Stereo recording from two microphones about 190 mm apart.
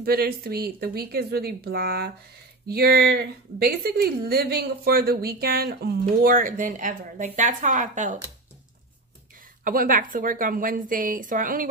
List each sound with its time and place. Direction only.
0.0 s a woman's voice: 55° right (ahead or behind)
9.7 s a woman's voice: 45° right (ahead or behind)